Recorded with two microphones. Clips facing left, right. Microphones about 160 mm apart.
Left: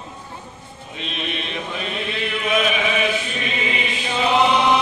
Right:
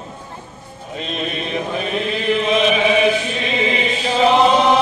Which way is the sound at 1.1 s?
40° right (ahead or behind).